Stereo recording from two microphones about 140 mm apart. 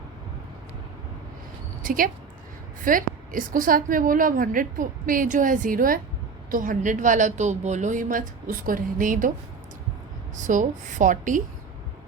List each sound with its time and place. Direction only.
1.8 s a woman's voice: 80° right
6.5 s a woman's voice: 70° right (ahead or behind)
10.3 s a woman's voice: 65° right (ahead or behind)